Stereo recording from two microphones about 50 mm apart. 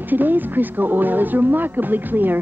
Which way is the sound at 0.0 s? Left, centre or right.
Right.